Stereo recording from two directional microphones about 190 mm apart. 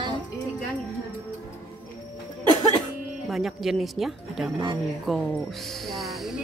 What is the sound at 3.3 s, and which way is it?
Speech, centre (ahead or behind).